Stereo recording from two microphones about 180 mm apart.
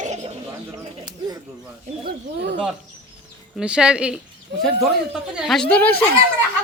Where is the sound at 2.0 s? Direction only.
70° right (ahead or behind).